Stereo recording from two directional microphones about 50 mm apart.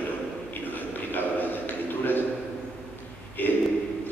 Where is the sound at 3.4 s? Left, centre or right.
Left.